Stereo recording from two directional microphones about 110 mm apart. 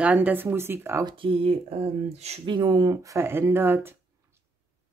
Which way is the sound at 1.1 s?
55° right (ahead or behind).